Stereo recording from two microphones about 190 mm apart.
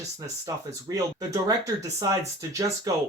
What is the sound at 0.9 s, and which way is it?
Speech, 20° right (ahead or behind).